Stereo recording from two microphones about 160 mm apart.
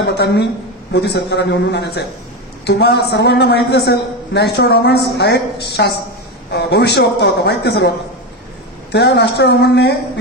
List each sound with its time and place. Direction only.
0.0 s a man's voice: 90° left
8.9 s a man's voice: 90° left